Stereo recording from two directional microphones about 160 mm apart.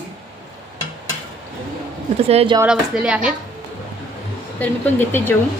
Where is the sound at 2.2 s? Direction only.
40° right (ahead or behind).